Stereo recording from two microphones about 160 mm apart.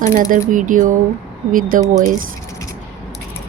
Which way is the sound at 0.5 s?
55° right (ahead or behind).